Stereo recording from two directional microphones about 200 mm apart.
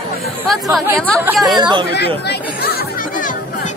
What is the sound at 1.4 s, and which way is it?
Speech, 20° right (ahead or behind).